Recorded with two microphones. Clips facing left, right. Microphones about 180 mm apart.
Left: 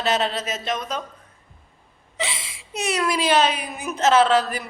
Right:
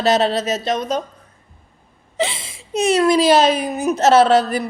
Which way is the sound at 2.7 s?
25° right (ahead or behind).